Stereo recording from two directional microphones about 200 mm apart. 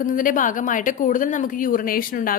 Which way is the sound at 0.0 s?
40° left (ahead or behind).